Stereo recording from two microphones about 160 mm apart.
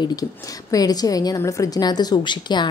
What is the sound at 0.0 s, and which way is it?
A woman's voice, 25° left (ahead or behind).